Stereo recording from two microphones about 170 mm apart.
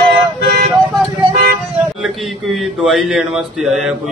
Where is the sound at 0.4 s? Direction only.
70° right (ahead or behind).